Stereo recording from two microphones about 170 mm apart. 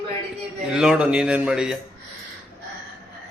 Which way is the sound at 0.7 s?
5° right (ahead or behind).